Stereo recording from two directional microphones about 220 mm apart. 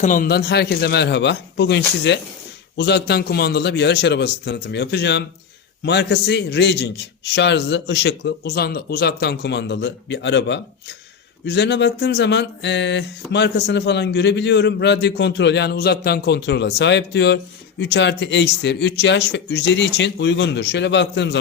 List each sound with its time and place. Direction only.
0.0 s speech: 40° left (ahead or behind); by 21.3 s 55° left (ahead or behind)